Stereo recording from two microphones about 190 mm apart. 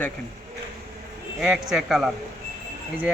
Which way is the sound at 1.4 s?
5° right (ahead or behind).